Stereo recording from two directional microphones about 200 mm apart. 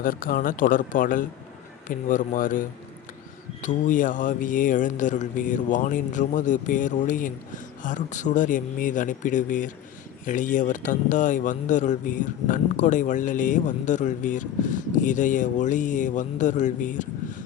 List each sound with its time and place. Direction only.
0.0 s a man's voice: 45° left (ahead or behind)